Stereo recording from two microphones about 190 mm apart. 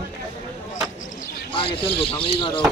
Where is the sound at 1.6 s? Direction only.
30° left (ahead or behind).